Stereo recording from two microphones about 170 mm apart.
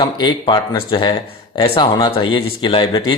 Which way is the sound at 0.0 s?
30° left (ahead or behind).